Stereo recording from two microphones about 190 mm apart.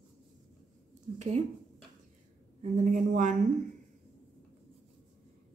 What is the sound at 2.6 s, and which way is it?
Speech, 40° right (ahead or behind).